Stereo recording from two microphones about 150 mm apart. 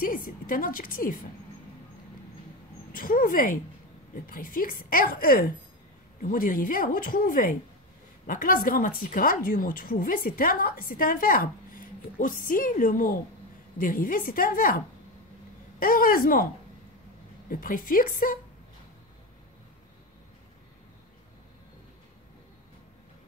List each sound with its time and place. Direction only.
0.0 s a woman's voice: 70° left (ahead or behind)
2.9 s a woman's voice: 70° left (ahead or behind)
6.2 s a woman's voice: 70° left (ahead or behind)
15.8 s a woman's voice: 75° left (ahead or behind)
17.5 s a woman's voice: 70° left (ahead or behind)